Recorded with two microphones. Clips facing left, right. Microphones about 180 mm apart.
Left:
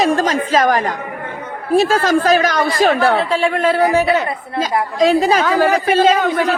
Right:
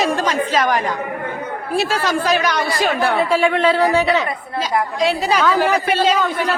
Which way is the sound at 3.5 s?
45° left (ahead or behind).